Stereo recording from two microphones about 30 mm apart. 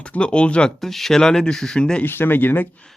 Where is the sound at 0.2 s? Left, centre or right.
Left.